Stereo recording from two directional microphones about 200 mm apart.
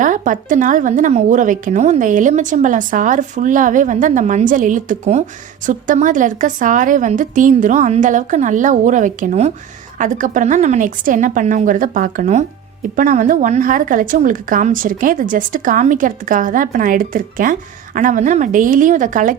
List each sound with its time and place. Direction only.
0.0 s speech: 40° right (ahead or behind)